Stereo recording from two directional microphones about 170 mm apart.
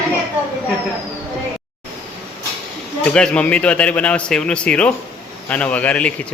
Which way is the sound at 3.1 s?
5° left (ahead or behind).